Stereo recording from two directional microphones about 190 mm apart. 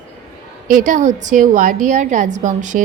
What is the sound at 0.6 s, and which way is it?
A woman's voice, 45° right (ahead or behind).